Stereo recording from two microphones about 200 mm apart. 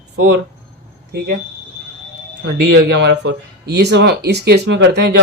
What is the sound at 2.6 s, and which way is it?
Speech, 60° right (ahead or behind).